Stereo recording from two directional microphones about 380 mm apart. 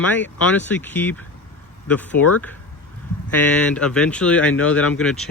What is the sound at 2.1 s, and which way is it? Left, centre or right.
Speech, left.